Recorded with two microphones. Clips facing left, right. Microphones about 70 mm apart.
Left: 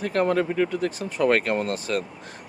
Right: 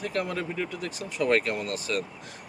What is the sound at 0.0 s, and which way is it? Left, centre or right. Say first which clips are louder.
Speech: left 8 dB; left.